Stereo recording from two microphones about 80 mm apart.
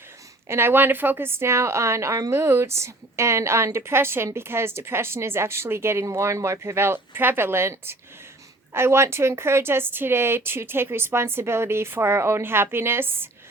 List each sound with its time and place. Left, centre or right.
0.4 s a woman's voice: right